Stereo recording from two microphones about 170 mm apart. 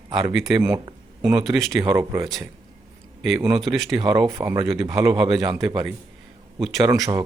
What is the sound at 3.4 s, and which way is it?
Speech, 25° right (ahead or behind).